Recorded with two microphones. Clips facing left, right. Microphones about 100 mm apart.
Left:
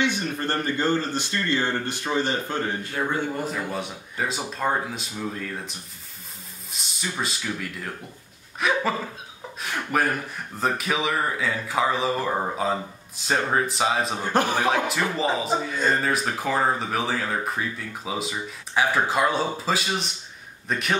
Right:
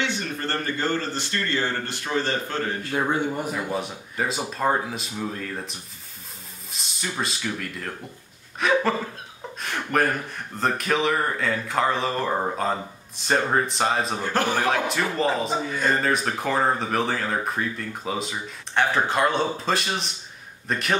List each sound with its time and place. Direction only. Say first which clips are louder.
0.0 s a man's voice: left 3 dB; 15° left (ahead or behind)
3.7 s speech: right 2 dB; centre (ahead or behind)
14.2 s a man's voice: left 3 dB; 15° left (ahead or behind)
14.6 s speech: even; centre (ahead or behind)